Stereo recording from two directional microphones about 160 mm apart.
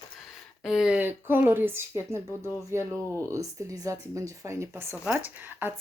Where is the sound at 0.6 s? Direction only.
5° right (ahead or behind).